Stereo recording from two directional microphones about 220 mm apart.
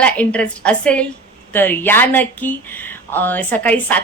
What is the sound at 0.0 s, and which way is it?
A woman's voice, 5° left (ahead or behind).